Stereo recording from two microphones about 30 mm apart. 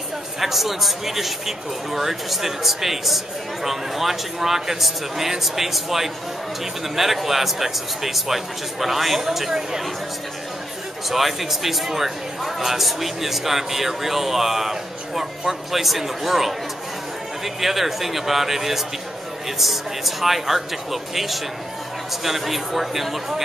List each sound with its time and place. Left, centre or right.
0.4 s a man's voice: centre
9.5 s speech: centre
11.1 s a man's voice: centre
17.6 s a man's voice: centre